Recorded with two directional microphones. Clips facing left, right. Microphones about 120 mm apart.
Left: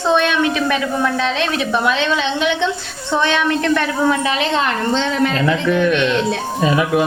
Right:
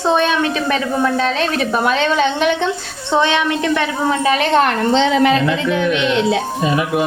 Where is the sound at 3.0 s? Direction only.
25° right (ahead or behind).